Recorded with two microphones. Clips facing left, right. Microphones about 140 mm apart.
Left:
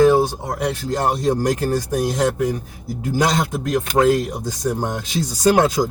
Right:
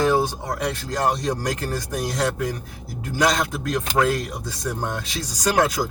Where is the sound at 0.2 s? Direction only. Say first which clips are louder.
Left 4 dB; 25° left (ahead or behind).